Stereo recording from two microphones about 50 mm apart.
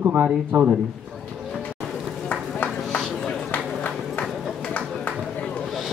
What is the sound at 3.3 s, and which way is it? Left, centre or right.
Run, left.